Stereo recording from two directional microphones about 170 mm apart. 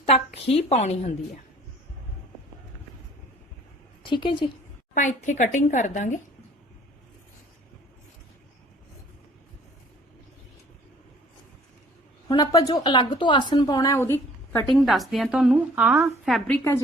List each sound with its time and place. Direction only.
0.4 s speech: 40° left (ahead or behind)
4.0 s a woman's voice: 30° left (ahead or behind)
4.9 s a woman's voice: 45° left (ahead or behind)
12.3 s a woman's voice: 20° left (ahead or behind)
14.8 s a woman's voice: centre (ahead or behind)
16.5 s a woman's voice: 15° left (ahead or behind)